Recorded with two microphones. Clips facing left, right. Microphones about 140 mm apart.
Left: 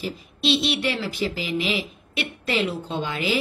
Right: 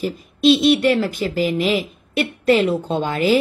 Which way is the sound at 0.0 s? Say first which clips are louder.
Right 10 dB; 45° right (ahead or behind).